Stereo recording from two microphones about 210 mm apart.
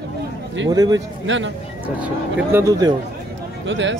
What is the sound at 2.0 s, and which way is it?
Speech, 10° right (ahead or behind).